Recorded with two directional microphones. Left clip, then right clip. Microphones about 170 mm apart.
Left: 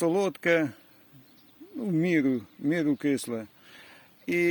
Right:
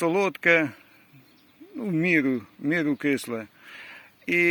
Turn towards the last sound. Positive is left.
turn(degrees=10)  # may be behind; listen again after turning